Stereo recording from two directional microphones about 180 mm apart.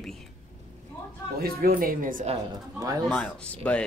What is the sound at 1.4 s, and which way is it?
Speech, 55° right (ahead or behind).